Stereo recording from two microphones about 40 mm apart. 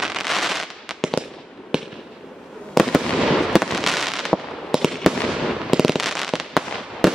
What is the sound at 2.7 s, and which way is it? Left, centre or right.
Fireworks, centre.